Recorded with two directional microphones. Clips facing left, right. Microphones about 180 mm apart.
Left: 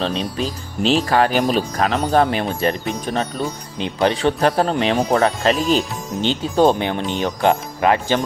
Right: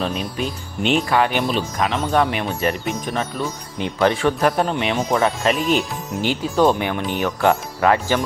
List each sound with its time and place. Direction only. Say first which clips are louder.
0.0 s speech: left 2 dB; 30° left (ahead or behind)
3.8 s speech: even; 20° left (ahead or behind)
4.4 s speech: left 2 dB; 35° left (ahead or behind)